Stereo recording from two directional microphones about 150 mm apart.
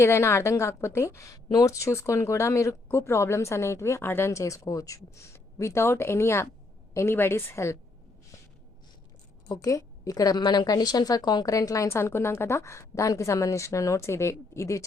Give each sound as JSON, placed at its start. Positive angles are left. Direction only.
{"t": 0.0, "sound": "a woman's voice", "side_deg": 20}
{"t": 9.5, "sound": "a woman's voice", "side_deg": 25}